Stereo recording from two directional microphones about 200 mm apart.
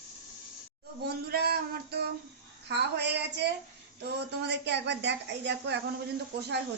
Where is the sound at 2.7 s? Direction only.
55° right (ahead or behind).